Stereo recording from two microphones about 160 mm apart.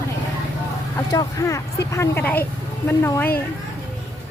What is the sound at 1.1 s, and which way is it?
Speech, 20° left (ahead or behind).